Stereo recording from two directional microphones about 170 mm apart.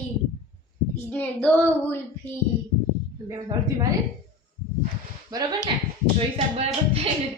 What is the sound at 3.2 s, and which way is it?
Speech, 20° right (ahead or behind).